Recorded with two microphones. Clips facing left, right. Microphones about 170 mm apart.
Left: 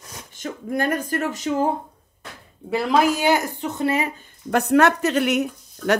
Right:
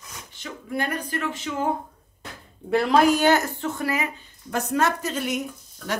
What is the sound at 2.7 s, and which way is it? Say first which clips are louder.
Speech: right 1 dB; centre (ahead or behind).